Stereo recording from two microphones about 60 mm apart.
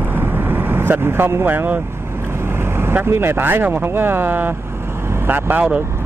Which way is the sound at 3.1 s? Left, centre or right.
Right.